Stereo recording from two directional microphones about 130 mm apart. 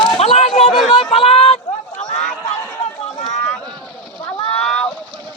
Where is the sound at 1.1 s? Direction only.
45° left (ahead or behind).